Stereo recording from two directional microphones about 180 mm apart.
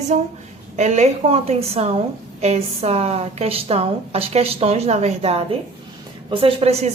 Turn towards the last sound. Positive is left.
turn(degrees=-35)  # may be behind; listen again after turning